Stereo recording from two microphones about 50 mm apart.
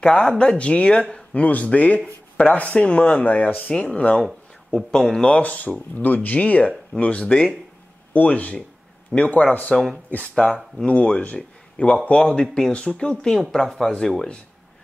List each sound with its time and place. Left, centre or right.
0.0 s speech: centre
4.6 s speech: centre
5.2 s speech: left
10.3 s speech: centre
13.4 s speech: centre